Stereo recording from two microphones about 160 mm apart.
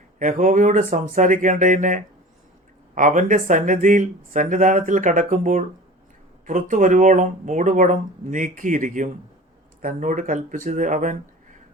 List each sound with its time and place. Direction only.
0.2 s speech: 50° right (ahead or behind)